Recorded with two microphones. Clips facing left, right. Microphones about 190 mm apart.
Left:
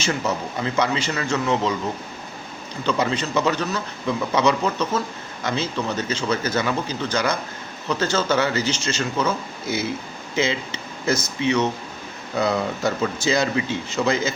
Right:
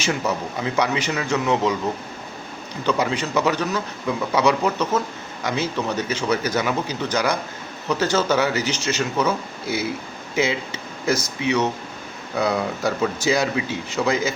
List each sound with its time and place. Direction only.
0.0 s a man's voice: 10° right (ahead or behind)
2.8 s a man's voice: 10° right (ahead or behind)